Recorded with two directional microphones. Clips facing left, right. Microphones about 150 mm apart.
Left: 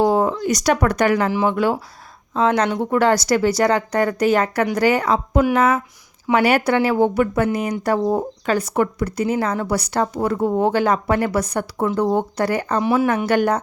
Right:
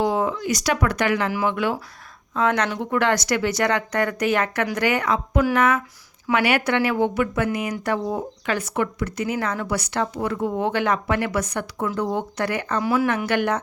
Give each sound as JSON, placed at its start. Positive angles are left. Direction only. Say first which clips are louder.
{"t": 0.0, "sound": "speech", "louder": "left 5 dB", "side_deg": 40}
{"t": 13.2, "sound": "speech", "louder": "left 4 dB", "side_deg": 35}